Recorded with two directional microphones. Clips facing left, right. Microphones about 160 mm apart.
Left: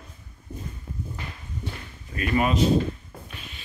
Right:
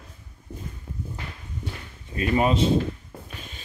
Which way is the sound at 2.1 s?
30° right (ahead or behind).